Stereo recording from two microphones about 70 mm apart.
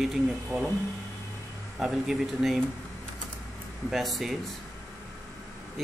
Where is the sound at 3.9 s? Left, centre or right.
Centre.